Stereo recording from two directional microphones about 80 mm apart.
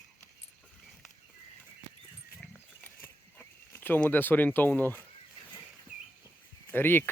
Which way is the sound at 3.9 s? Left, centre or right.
Left.